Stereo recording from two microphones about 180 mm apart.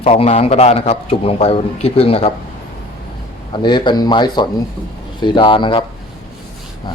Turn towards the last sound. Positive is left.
turn(degrees=30)  # may be behind; listen again after turning